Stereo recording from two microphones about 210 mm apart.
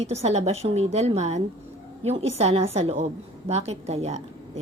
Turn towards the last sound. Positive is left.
turn(degrees=-30)  # may be behind; listen again after turning